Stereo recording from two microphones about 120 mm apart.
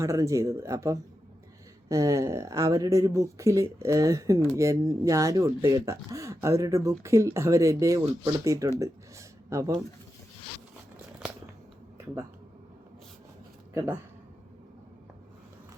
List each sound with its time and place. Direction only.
0.0 s speech: 25° right (ahead or behind)
8.8 s a sound: 25° right (ahead or behind)
13.7 s speech: 20° right (ahead or behind)